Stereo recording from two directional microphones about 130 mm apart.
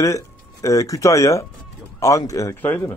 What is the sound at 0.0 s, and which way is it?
A man's voice, 25° left (ahead or behind).